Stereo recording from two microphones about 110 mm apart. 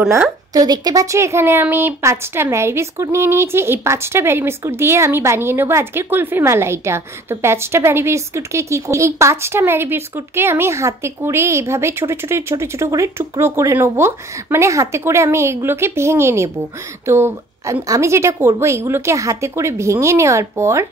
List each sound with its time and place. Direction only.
0.5 s speech: 35° right (ahead or behind)